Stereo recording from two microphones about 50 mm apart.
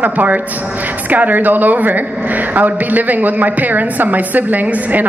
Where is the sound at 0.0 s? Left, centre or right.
Right.